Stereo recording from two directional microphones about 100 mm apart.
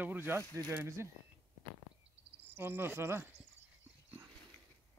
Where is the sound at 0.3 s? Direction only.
25° right (ahead or behind).